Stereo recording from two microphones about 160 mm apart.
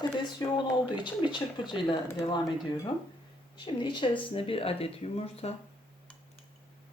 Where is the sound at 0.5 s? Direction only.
30° left (ahead or behind).